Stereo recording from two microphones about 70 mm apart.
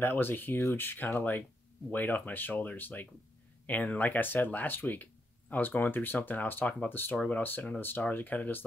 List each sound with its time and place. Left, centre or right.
0.0 s speech: left
0.6 s speech: left
0.8 s speech: left